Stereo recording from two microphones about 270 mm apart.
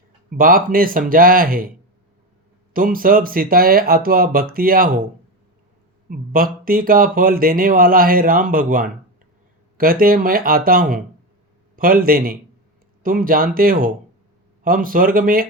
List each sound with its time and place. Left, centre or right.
0.3 s speech: right
2.7 s speech: right
6.1 s speech: right